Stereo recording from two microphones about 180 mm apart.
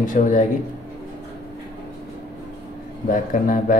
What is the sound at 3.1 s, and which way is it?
Speech, 50° left (ahead or behind).